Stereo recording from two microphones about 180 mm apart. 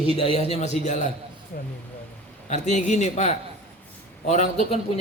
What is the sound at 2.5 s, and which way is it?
A man's voice, 40° left (ahead or behind).